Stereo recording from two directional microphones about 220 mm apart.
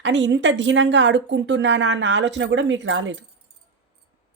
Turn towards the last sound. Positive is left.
turn(degrees=-60)  # may be behind; listen again after turning